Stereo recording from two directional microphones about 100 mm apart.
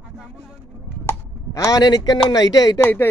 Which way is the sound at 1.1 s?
30° left (ahead or behind).